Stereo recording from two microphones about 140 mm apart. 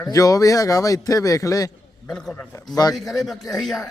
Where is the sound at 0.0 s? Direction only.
25° left (ahead or behind).